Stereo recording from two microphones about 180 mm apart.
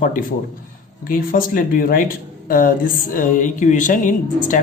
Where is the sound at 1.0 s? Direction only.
50° left (ahead or behind).